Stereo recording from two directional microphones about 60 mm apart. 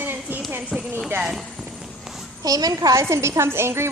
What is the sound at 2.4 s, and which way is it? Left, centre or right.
Speech, right.